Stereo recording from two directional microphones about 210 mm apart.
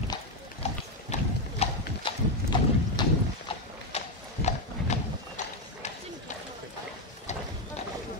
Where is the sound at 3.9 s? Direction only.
30° left (ahead or behind).